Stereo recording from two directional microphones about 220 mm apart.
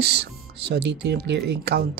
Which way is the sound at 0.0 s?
50° right (ahead or behind).